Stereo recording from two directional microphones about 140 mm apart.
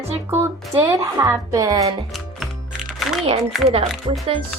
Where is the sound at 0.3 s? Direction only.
15° right (ahead or behind).